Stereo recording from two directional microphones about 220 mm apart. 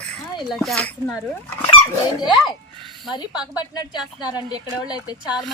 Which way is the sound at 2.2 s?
Centre (ahead or behind).